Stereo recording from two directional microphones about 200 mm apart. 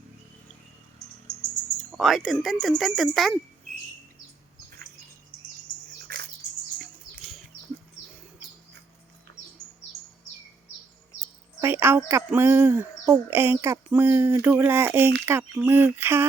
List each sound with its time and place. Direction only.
1.9 s speech: centre (ahead or behind)
6.1 s bird: 50° right (ahead or behind)
11.6 s a sound: 10° right (ahead or behind)